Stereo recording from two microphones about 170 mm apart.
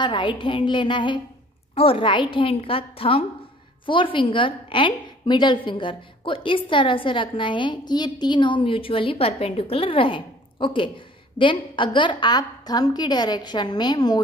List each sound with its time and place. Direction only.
0.0 s a woman's voice: 30° left (ahead or behind)